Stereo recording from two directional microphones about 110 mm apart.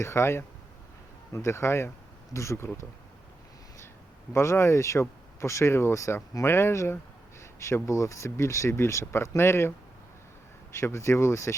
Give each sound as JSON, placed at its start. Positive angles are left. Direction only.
{"t": 0.0, "sound": "speech", "side_deg": 25}
{"t": 4.3, "sound": "speech", "side_deg": 25}